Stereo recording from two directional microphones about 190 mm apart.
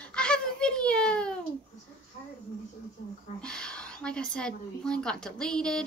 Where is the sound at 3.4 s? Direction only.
5° left (ahead or behind).